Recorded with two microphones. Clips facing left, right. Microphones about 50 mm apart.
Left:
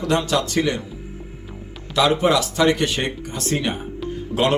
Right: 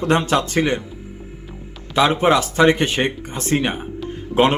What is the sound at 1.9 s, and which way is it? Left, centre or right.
Speech, right.